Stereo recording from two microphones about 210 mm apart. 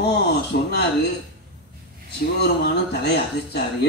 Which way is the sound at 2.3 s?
50° left (ahead or behind).